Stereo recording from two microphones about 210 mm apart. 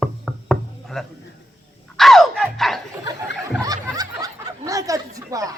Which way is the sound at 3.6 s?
15° right (ahead or behind).